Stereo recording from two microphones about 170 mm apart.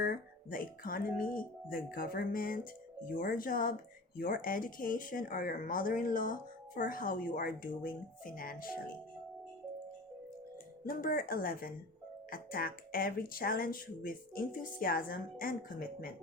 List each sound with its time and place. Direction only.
0.0 s speech: 60° left (ahead or behind)
10.8 s speech: 55° left (ahead or behind)